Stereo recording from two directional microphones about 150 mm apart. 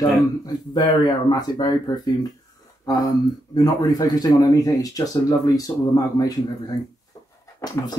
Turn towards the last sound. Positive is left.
turn(degrees=20)  # may be behind; listen again after turning